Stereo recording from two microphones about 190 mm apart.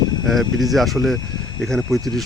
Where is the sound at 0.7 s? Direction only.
Centre (ahead or behind).